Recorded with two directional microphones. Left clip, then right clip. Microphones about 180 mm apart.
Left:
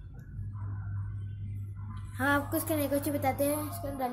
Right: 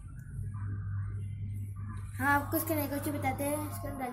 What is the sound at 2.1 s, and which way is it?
Speech, 35° left (ahead or behind).